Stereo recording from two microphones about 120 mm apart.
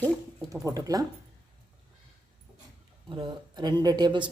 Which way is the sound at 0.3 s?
30° right (ahead or behind).